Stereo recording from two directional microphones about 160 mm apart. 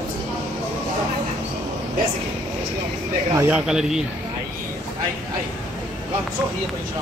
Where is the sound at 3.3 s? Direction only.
15° right (ahead or behind).